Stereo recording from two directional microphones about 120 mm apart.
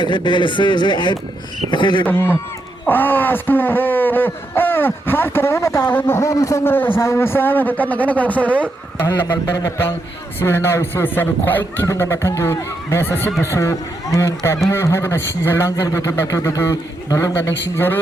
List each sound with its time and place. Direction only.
0.0 s speech: 40° left (ahead or behind)
2.0 s a man's voice: 20° left (ahead or behind)
10.4 s a man's voice: 20° left (ahead or behind)